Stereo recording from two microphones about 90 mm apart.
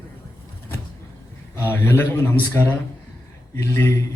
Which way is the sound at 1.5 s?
25° left (ahead or behind).